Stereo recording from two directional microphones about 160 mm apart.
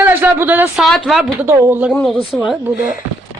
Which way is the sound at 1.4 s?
15° right (ahead or behind).